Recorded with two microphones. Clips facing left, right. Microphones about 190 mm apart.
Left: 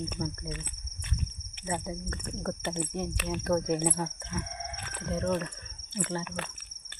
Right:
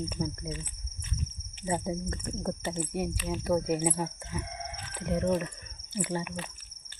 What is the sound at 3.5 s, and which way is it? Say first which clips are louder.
Speech: right 1 dB; 10° right (ahead or behind).